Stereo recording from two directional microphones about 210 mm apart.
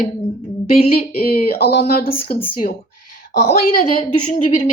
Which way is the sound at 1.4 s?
45° left (ahead or behind).